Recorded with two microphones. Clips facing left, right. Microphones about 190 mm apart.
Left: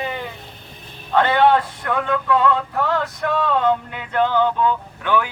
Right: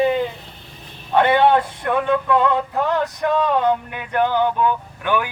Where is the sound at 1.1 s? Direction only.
20° right (ahead or behind).